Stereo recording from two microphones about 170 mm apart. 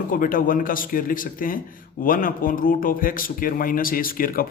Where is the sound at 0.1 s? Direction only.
55° left (ahead or behind).